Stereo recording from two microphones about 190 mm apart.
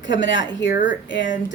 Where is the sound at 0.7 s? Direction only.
45° left (ahead or behind).